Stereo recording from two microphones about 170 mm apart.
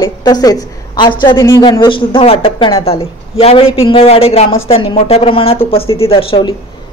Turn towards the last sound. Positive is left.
turn(degrees=35)  # may be behind; listen again after turning